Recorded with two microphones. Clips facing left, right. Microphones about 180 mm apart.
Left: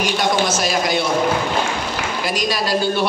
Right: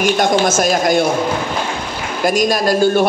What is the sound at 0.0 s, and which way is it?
A man's voice, 50° right (ahead or behind).